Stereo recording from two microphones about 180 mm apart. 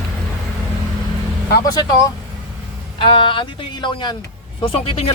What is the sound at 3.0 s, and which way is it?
Speech, 30° left (ahead or behind).